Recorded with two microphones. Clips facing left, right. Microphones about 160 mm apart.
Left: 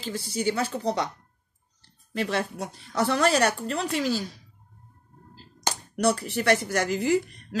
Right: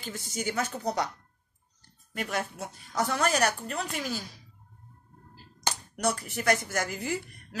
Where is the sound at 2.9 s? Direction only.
70° left (ahead or behind).